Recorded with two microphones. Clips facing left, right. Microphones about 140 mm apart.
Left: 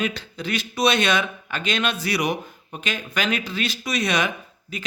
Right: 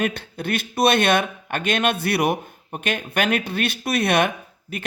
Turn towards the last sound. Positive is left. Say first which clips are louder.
# right 2 dB
turn(degrees=-60)  # may be behind; listen again after turning